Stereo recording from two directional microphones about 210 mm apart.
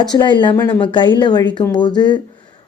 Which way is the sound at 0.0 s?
20° left (ahead or behind).